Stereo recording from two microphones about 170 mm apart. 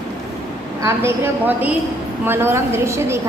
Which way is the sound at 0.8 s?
15° right (ahead or behind).